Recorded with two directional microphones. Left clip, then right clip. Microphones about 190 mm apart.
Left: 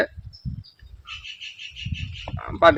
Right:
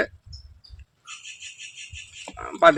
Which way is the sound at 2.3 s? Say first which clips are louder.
Even; 20° left (ahead or behind).